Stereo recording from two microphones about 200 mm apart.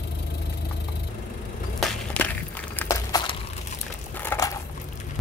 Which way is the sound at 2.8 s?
15° left (ahead or behind).